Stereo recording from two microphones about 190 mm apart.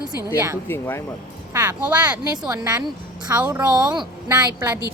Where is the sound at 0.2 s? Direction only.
20° left (ahead or behind).